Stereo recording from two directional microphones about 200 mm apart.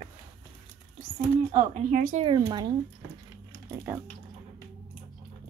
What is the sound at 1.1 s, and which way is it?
Speech, 40° right (ahead or behind).